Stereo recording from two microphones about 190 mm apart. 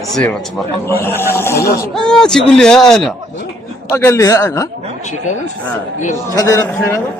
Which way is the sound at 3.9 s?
15° left (ahead or behind).